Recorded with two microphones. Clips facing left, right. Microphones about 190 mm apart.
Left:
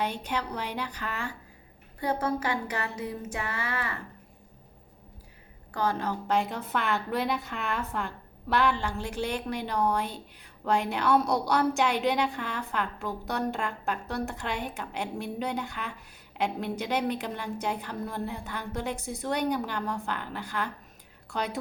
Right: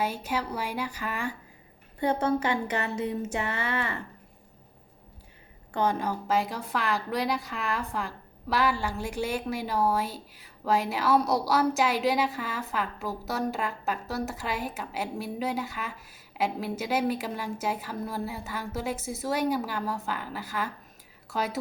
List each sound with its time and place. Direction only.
0.0 s speech: 5° right (ahead or behind)
2.0 s a sound: 25° right (ahead or behind)
5.7 s a woman's voice: 20° right (ahead or behind)